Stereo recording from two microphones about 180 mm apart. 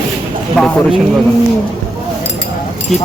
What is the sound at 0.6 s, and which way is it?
Speech, centre (ahead or behind).